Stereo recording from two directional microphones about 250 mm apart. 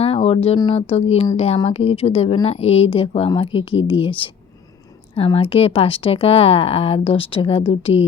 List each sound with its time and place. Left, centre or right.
0.0 s speech: left